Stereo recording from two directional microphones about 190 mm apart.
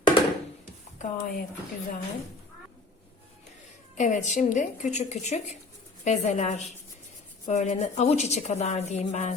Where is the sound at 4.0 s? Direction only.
40° left (ahead or behind).